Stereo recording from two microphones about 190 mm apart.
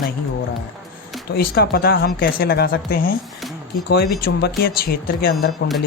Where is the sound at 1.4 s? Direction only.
55° left (ahead or behind).